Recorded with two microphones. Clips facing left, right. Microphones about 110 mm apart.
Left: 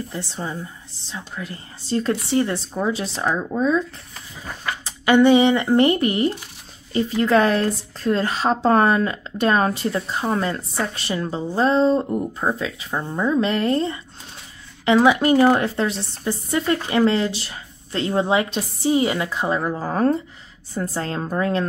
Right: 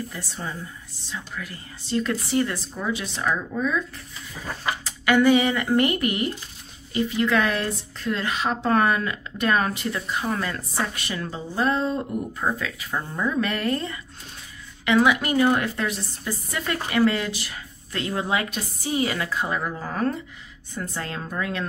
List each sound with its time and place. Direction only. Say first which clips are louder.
0.1 s speech: left 5 dB; 25° left (ahead or behind)
4.8 s speech: left 4 dB; 25° left (ahead or behind)